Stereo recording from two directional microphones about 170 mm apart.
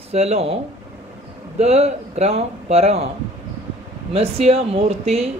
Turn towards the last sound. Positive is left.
turn(degrees=-35)  # may be behind; listen again after turning